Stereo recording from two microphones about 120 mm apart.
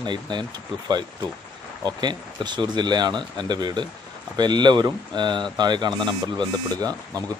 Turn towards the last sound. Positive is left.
turn(degrees=-30)  # may be behind; listen again after turning